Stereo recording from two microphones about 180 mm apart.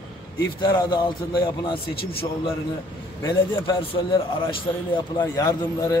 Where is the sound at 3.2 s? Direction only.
20° left (ahead or behind).